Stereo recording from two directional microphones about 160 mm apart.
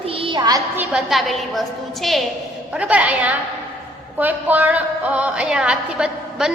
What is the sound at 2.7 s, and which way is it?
Music, 10° right (ahead or behind).